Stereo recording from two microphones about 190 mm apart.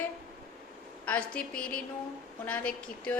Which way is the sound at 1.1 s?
5° left (ahead or behind).